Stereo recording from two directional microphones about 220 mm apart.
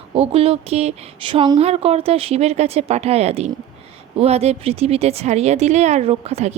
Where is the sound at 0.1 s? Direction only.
25° right (ahead or behind).